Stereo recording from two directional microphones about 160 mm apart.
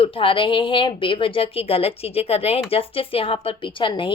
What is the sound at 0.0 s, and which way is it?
A woman's voice, 35° left (ahead or behind).